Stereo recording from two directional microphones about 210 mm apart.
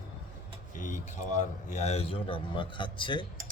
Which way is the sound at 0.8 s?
35° left (ahead or behind).